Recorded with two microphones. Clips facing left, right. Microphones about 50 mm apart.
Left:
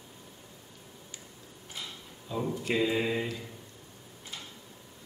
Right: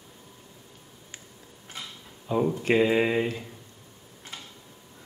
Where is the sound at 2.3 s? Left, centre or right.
Right.